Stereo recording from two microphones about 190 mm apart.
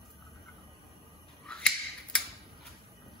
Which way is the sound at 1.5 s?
5° left (ahead or behind).